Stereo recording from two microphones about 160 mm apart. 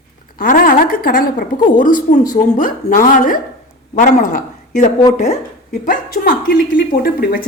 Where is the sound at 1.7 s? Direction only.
55° left (ahead or behind).